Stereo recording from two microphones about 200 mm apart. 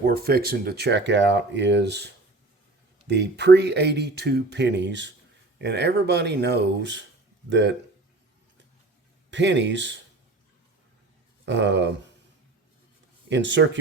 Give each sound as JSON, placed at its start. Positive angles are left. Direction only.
{"t": 0.0, "sound": "speech", "side_deg": -50}
{"t": 9.3, "sound": "speech", "side_deg": -65}
{"t": 11.4, "sound": "speech", "side_deg": -60}
{"t": 13.2, "sound": "speech", "side_deg": -65}